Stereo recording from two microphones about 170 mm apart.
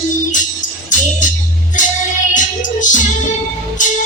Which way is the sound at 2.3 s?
50° left (ahead or behind).